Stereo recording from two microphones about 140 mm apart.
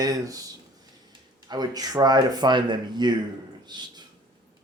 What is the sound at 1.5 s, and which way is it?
Speech, 30° right (ahead or behind).